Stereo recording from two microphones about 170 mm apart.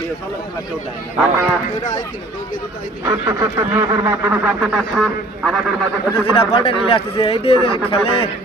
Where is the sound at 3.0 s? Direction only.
20° right (ahead or behind); by 5.5 s centre (ahead or behind).